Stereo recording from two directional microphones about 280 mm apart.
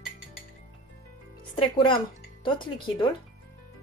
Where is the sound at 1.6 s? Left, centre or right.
Centre.